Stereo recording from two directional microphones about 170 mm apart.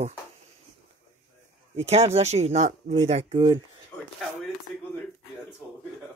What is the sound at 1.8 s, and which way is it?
Speech, 40° right (ahead or behind).